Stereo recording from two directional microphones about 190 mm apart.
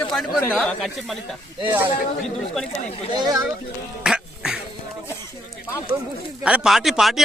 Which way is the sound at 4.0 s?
5° right (ahead or behind).